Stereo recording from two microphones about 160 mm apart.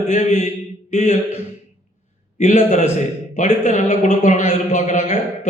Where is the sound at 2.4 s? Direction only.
45° left (ahead or behind).